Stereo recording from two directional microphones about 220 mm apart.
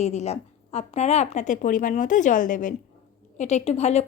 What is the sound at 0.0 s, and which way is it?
A woman's voice, 30° left (ahead or behind).